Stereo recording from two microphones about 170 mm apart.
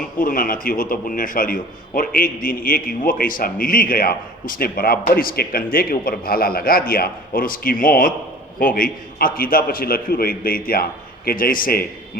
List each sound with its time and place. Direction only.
0.2 s a man's voice: 55° left (ahead or behind)